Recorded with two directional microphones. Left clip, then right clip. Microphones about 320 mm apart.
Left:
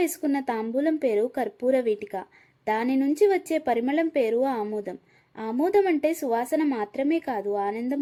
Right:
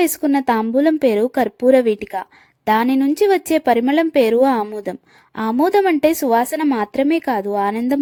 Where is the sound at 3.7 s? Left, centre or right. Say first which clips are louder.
Right 8 dB; right.